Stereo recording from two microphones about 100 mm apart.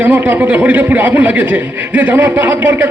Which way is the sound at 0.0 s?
15° right (ahead or behind).